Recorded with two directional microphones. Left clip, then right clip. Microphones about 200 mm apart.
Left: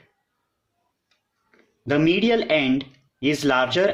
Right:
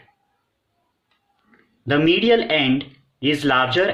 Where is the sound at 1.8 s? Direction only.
50° left (ahead or behind).